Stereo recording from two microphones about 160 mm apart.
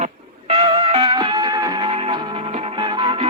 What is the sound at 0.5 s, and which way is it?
Music, 35° right (ahead or behind).